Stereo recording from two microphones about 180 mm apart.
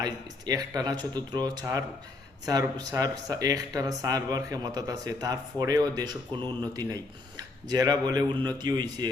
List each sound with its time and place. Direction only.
0.0 s speech: 20° right (ahead or behind)